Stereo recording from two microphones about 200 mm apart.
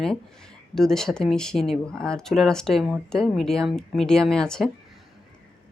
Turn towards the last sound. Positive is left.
turn(degrees=5)  # may be behind; listen again after turning